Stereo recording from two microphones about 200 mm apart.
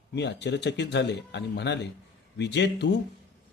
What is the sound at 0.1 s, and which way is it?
Speech, 60° left (ahead or behind).